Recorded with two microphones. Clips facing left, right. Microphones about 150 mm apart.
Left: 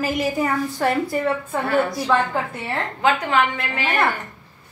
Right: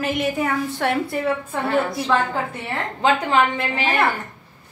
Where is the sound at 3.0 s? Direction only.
30° right (ahead or behind).